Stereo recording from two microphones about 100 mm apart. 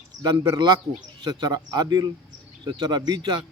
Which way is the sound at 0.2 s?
40° right (ahead or behind).